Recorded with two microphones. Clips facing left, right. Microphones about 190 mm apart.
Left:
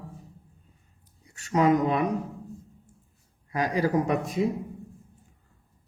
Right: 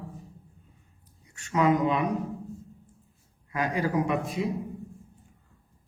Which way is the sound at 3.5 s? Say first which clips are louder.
Left 3 dB; 35° left (ahead or behind).